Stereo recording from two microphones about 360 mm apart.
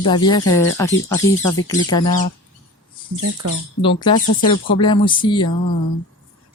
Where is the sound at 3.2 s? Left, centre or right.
Right.